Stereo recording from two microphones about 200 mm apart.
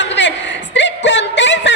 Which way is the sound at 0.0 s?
65° left (ahead or behind).